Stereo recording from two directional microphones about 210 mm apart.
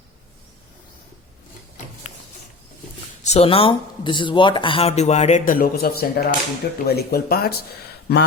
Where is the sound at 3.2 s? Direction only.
30° left (ahead or behind); by 7.5 s 45° left (ahead or behind).